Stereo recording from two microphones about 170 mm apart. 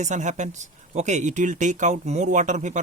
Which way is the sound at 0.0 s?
45° right (ahead or behind).